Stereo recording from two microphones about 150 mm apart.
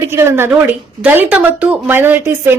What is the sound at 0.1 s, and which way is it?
Speech, 15° right (ahead or behind).